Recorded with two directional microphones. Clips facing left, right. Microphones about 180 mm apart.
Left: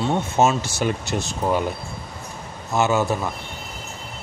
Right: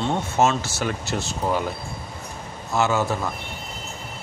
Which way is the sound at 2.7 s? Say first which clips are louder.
Left 2 dB; 20° left (ahead or behind).